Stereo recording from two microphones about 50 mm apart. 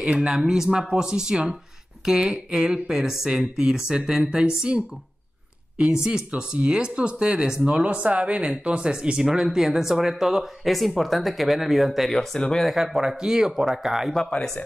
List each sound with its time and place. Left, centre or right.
0.0 s speech: centre
2.0 s speech: centre
6.0 s speech: centre
9.2 s speech: centre